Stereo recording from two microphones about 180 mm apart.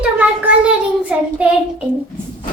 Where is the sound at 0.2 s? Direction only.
5° right (ahead or behind).